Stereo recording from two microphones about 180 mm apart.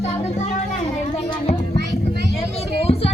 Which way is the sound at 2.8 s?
35° left (ahead or behind).